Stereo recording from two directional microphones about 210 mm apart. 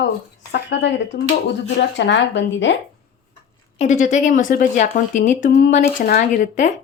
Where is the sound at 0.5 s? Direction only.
60° left (ahead or behind).